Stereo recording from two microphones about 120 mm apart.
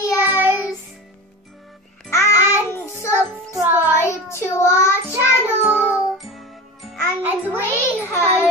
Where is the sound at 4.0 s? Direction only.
25° left (ahead or behind).